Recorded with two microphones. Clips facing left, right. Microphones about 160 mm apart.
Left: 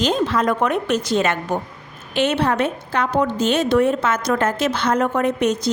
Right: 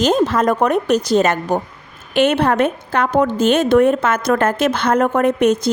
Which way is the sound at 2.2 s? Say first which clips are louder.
Right 4 dB; 55° right (ahead or behind).